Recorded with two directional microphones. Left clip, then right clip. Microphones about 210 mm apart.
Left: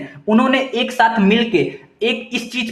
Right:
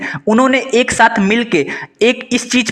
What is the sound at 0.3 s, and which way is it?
A man's voice, 40° right (ahead or behind).